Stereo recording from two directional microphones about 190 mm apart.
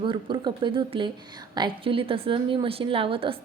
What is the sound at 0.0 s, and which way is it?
A woman's voice, 25° right (ahead or behind).